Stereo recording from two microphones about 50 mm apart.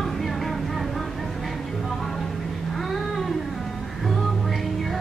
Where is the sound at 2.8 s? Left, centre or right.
Centre.